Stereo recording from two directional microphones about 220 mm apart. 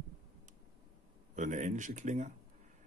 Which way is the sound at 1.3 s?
35° right (ahead or behind).